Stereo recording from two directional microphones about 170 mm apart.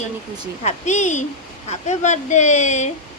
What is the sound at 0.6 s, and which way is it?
A woman's voice, 45° left (ahead or behind).